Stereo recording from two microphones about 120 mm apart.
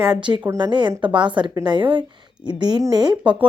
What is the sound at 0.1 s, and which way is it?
A woman's voice, 40° right (ahead or behind).